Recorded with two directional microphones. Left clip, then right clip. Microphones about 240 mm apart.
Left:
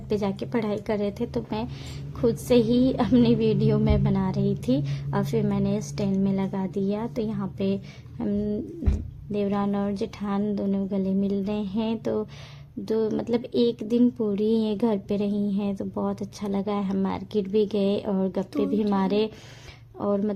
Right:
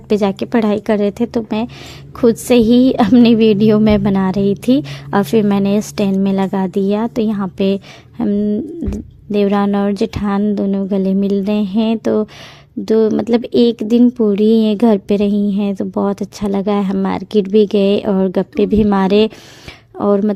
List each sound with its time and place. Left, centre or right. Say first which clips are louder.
0.1 s speech: right 12 dB; right
8.2 s a sound: right 11 dB; right
9.3 s speech: right 12 dB; right